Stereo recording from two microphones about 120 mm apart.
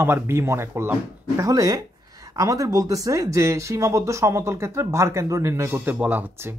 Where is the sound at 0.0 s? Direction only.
20° right (ahead or behind).